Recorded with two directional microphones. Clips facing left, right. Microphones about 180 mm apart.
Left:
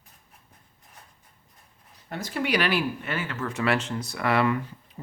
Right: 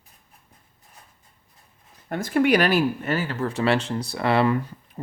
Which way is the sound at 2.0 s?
50° right (ahead or behind).